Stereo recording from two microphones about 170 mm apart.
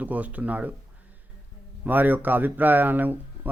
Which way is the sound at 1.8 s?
10° right (ahead or behind).